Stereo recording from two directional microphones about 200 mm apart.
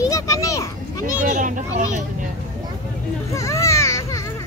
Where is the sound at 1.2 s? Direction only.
40° right (ahead or behind).